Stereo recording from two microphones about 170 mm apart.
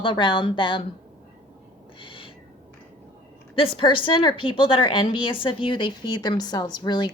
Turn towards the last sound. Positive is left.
turn(degrees=25)  # may be behind; listen again after turning